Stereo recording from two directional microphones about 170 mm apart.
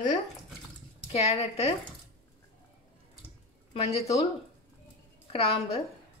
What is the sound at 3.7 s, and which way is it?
Speech, 40° left (ahead or behind).